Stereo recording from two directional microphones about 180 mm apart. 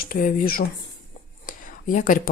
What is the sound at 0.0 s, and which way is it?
Speech, 50° left (ahead or behind).